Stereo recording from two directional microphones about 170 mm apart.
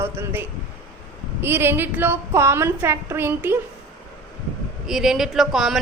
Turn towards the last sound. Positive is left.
turn(degrees=0)  # may be behind; listen again after turning